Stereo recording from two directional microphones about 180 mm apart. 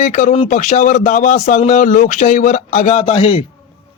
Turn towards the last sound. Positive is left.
turn(degrees=30)  # may be behind; listen again after turning